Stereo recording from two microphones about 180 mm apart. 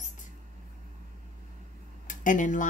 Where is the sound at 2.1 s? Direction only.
45° left (ahead or behind).